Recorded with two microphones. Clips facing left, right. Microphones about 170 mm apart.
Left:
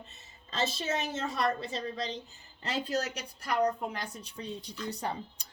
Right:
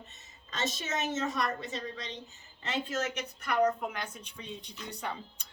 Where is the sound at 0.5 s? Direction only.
30° left (ahead or behind).